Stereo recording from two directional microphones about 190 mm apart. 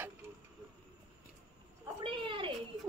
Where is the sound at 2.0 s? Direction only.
25° right (ahead or behind).